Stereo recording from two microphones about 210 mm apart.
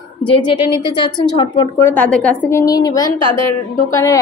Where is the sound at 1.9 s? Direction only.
5° left (ahead or behind).